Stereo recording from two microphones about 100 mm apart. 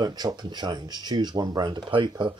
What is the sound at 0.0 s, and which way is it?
Speech, 45° right (ahead or behind).